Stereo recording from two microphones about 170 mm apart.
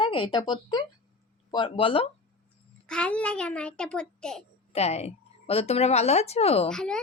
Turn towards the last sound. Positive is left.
turn(degrees=5)  # may be behind; listen again after turning